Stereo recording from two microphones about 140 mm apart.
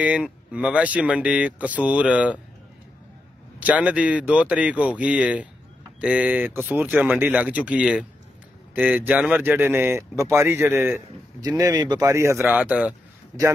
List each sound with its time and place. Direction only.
0.0 s speech: 10° right (ahead or behind)
3.5 s speech: 10° right (ahead or behind)
11.4 s speech: 25° right (ahead or behind)
12.4 s speech: 10° right (ahead or behind)